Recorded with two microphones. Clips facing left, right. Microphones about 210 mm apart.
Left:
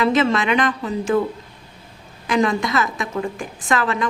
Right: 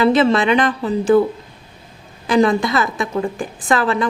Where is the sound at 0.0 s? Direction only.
30° right (ahead or behind).